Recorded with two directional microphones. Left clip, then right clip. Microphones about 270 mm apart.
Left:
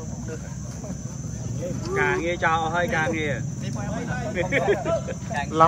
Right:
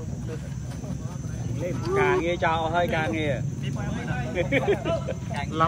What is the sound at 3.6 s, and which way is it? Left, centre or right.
Vehicle, left.